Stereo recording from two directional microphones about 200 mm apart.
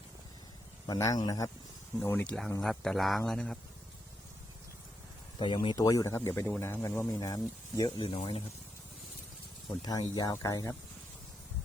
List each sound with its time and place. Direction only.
0.9 s speech: 20° left (ahead or behind); by 3.6 s centre (ahead or behind)
5.6 s speech: 20° left (ahead or behind)
9.8 s speech: 20° left (ahead or behind)